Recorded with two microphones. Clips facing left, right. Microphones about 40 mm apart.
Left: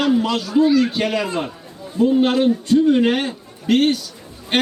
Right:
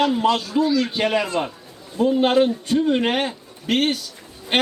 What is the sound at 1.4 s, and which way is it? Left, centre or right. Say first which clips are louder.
Speech: even; centre.